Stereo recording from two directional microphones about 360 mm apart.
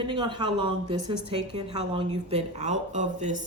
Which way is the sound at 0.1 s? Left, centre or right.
Centre.